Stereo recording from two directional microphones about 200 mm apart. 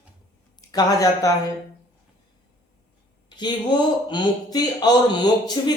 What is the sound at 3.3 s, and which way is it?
Speech, 20° left (ahead or behind).